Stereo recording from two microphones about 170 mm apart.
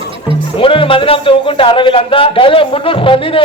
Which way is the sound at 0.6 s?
30° left (ahead or behind).